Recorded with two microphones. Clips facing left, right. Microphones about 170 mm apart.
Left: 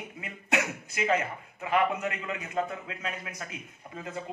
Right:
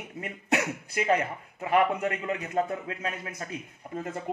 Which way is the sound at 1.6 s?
35° right (ahead or behind).